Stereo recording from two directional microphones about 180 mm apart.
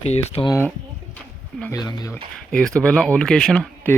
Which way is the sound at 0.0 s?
35° left (ahead or behind).